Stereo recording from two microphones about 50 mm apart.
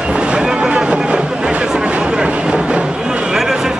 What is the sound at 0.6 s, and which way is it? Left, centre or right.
Vehicle, right.